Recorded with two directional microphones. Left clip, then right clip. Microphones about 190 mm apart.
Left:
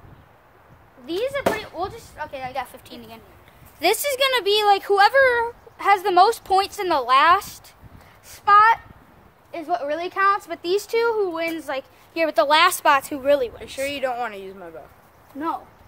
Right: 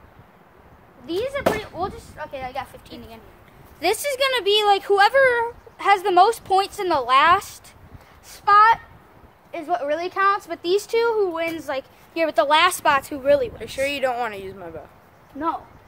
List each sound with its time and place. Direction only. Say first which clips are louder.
1.0 s speech: even; 30° left (ahead or behind)
13.6 s speech: right 3 dB; 30° right (ahead or behind)
15.3 s speech: right 1 dB; 35° left (ahead or behind)